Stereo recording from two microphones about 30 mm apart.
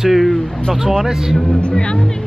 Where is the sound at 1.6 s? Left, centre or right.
Left.